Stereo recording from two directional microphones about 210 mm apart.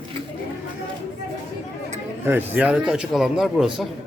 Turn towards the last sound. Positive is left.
turn(degrees=0)  # may be behind; listen again after turning